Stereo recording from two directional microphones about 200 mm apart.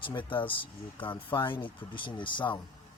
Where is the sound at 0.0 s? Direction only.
25° left (ahead or behind).